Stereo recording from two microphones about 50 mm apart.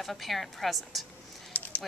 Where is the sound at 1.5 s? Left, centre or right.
Left.